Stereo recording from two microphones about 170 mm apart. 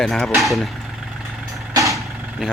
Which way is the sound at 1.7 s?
20° right (ahead or behind).